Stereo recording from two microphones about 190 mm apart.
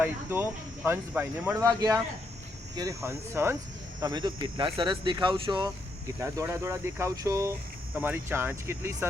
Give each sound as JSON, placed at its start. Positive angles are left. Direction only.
{"t": 0.0, "sound": "speech", "side_deg": -10}